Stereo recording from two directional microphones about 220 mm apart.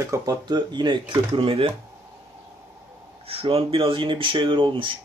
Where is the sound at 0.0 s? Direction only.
15° right (ahead or behind).